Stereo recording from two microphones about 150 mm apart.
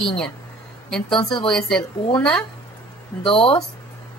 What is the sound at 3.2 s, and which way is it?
Speech, 35° left (ahead or behind).